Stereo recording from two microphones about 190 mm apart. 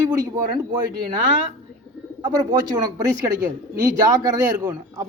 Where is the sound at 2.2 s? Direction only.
20° right (ahead or behind).